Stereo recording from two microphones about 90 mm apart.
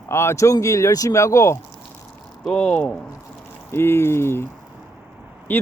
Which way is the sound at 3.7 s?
30° left (ahead or behind).